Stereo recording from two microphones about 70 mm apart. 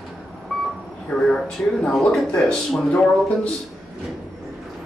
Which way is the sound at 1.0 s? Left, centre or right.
Centre.